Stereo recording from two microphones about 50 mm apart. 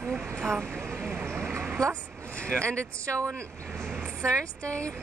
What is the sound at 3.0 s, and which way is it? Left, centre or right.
Speech, right.